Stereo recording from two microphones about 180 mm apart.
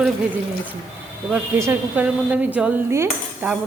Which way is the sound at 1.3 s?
10° right (ahead or behind).